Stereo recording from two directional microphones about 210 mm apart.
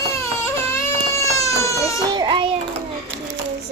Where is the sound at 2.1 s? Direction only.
20° right (ahead or behind).